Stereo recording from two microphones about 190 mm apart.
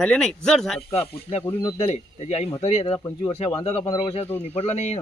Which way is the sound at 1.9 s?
35° left (ahead or behind).